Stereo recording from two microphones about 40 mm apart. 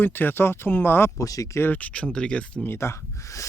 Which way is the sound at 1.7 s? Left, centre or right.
Left.